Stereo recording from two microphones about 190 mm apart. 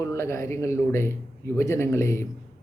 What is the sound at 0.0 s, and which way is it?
Speech, 15° left (ahead or behind).